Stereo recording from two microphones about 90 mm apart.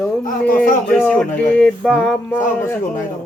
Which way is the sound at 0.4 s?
15° left (ahead or behind).